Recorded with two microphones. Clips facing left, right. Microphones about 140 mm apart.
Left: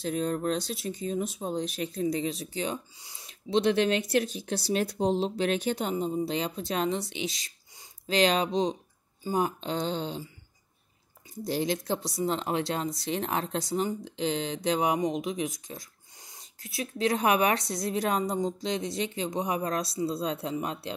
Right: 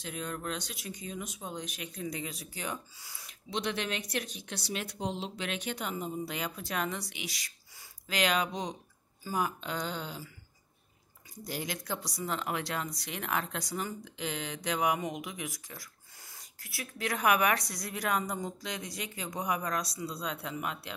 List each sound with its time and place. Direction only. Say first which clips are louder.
0.0 s speech: left 9 dB; 35° left (ahead or behind)
11.4 s speech: left 9 dB; 30° left (ahead or behind)